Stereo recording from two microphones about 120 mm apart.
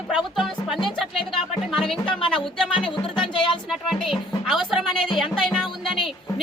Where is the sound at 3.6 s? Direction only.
Centre (ahead or behind).